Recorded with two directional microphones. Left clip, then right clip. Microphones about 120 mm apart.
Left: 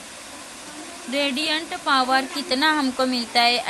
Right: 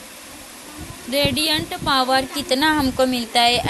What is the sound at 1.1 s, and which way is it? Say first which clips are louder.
Speech: right 4 dB; 50° right (ahead or behind).